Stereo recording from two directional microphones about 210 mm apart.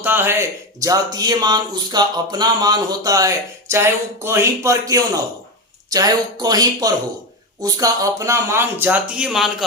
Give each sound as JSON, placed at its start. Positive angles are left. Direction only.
{"t": 0.0, "sound": "speech", "side_deg": -10}